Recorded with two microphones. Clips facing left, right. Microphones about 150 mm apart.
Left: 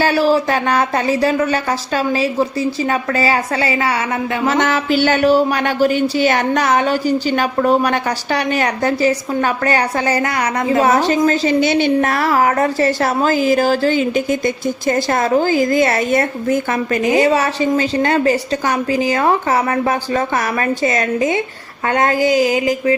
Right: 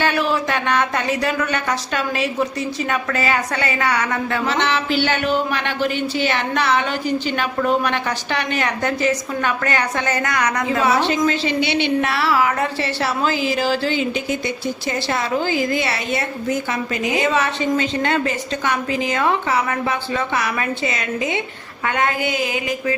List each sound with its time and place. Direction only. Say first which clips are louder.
0.0 s speech: left 6 dB; 35° left (ahead or behind); by 4.4 s 20° left (ahead or behind)
4.4 s speech: left 6 dB; 45° left (ahead or behind)
10.8 s a woman's voice: left 2 dB; 45° left (ahead or behind)